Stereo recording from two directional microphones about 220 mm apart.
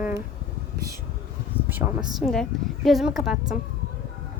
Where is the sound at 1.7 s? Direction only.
10° right (ahead or behind).